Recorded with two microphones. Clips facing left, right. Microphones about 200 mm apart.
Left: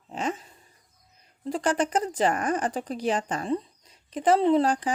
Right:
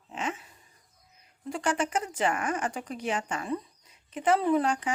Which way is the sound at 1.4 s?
35° left (ahead or behind).